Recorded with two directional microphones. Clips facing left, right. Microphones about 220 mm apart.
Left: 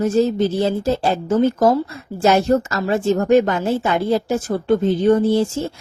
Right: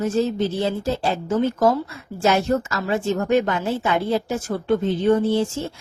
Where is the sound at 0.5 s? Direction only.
40° left (ahead or behind).